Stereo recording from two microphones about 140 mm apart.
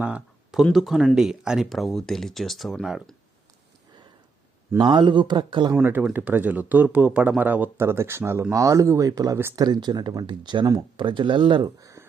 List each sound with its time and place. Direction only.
0.0 s a sound: 10° right (ahead or behind)
0.6 s speech: centre (ahead or behind)
4.8 s speech: 35° right (ahead or behind)
5.7 s speech: 15° right (ahead or behind)
9.6 s speech: 30° right (ahead or behind)
11.8 s a sound: 25° right (ahead or behind)